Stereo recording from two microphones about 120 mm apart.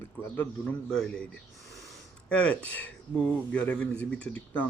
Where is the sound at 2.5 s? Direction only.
10° left (ahead or behind).